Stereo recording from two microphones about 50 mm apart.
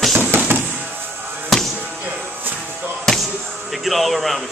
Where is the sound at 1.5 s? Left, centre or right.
Centre.